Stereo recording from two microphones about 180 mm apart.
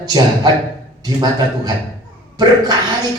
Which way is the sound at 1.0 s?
20° right (ahead or behind).